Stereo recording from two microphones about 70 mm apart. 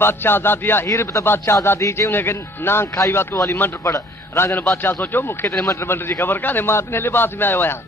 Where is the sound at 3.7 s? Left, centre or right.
Left.